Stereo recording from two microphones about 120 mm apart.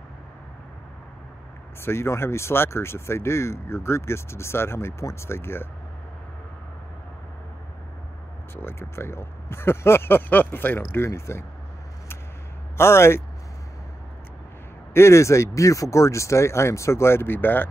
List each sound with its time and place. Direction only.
1.8 s speech: 20° left (ahead or behind)
8.5 s speech: 20° left (ahead or behind)
12.7 s speech: 20° left (ahead or behind)
15.0 s speech: 25° left (ahead or behind)